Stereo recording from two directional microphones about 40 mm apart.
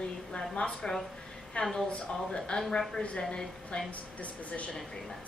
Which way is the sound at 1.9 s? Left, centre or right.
Left.